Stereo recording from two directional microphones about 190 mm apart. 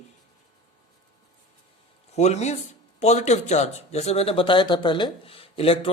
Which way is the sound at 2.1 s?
35° left (ahead or behind).